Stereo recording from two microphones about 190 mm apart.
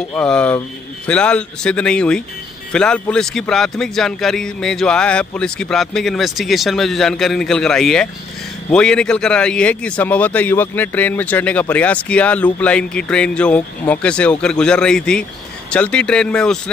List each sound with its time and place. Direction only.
0.1 s a man's voice: 5° left (ahead or behind)